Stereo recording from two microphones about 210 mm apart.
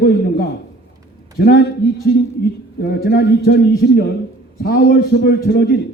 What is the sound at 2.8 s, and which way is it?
A man's voice, 50° left (ahead or behind).